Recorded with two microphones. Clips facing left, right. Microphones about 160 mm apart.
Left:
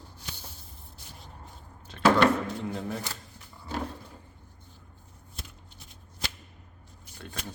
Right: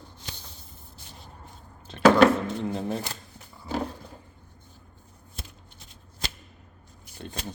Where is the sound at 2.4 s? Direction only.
25° right (ahead or behind).